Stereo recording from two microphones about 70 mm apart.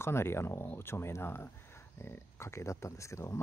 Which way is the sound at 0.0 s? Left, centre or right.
Left.